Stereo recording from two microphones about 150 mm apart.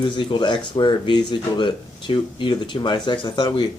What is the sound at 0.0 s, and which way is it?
Speech, 30° left (ahead or behind).